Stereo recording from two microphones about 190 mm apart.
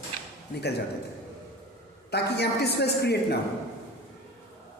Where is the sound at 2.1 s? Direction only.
60° left (ahead or behind).